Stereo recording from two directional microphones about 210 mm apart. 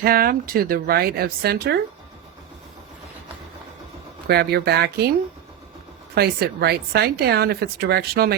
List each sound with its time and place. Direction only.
0.0 s a woman's voice: 45° right (ahead or behind)
4.3 s a woman's voice: 50° right (ahead or behind)
6.1 s a woman's voice: 50° right (ahead or behind)